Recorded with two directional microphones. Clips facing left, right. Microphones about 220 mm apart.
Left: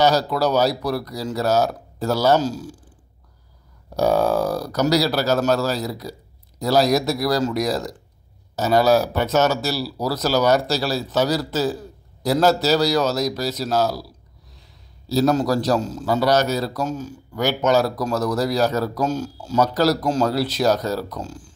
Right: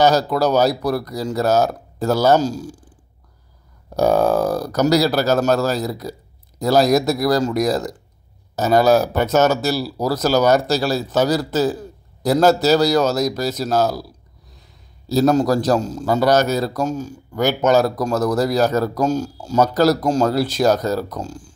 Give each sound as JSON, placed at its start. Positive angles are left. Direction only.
{"t": 0.0, "sound": "a man's voice", "side_deg": -50}
{"t": 3.9, "sound": "a man's voice", "side_deg": -45}
{"t": 15.0, "sound": "a man's voice", "side_deg": -45}